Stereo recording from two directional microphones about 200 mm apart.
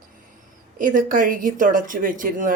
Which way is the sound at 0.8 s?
40° right (ahead or behind).